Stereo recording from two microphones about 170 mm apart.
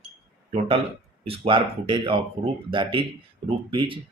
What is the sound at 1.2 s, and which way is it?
Speech, 35° right (ahead or behind).